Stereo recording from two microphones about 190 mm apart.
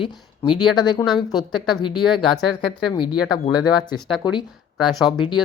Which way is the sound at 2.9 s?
25° left (ahead or behind).